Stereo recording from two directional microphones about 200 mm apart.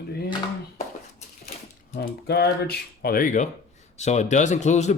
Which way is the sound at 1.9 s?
50° left (ahead or behind).